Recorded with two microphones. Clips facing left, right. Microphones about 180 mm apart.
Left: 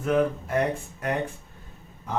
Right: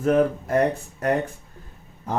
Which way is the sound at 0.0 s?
40° right (ahead or behind).